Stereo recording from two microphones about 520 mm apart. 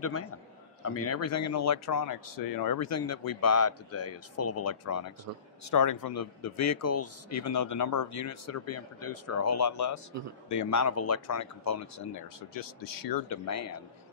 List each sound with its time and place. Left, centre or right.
0.0 s a man's voice: left